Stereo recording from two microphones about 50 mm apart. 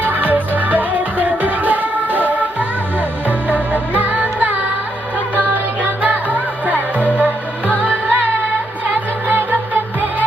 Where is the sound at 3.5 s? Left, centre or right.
Right.